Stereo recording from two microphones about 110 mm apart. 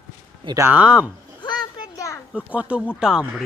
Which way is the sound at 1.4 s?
45° left (ahead or behind).